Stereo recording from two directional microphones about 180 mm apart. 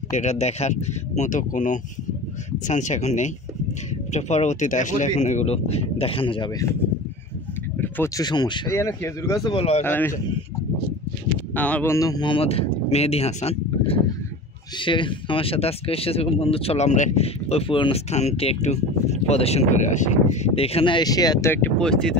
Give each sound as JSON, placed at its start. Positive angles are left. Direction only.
{"t": 0.1, "sound": "speech", "side_deg": 40}
{"t": 7.7, "sound": "a sound", "side_deg": 10}
{"t": 8.2, "sound": "speech", "side_deg": 25}
{"t": 9.6, "sound": "speech", "side_deg": 35}
{"t": 9.8, "sound": "speech", "side_deg": 10}
{"t": 11.5, "sound": "speech", "side_deg": 10}